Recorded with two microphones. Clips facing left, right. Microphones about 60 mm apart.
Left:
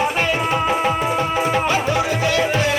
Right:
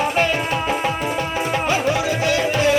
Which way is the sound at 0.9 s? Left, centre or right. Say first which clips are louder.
Left 3 dB; left.